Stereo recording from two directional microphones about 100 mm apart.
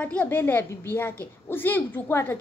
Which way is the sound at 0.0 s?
10° left (ahead or behind).